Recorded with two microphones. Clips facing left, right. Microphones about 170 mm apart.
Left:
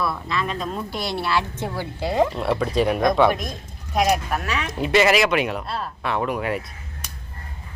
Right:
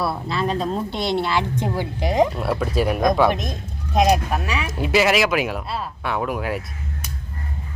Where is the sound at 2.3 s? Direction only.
Centre (ahead or behind).